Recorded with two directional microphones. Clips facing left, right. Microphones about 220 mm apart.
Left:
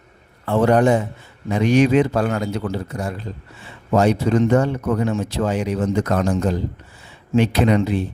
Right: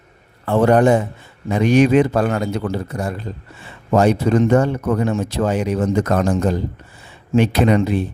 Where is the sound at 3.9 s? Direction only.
50° right (ahead or behind).